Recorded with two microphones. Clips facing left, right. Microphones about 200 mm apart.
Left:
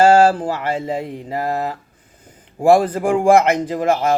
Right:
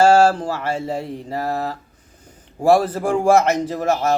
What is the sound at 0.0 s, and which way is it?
A man's voice, 15° left (ahead or behind).